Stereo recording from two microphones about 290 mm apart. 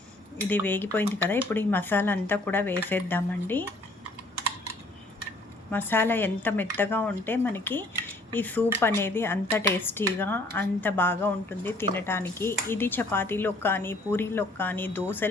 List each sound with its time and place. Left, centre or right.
0.4 s speech: centre
5.7 s speech: centre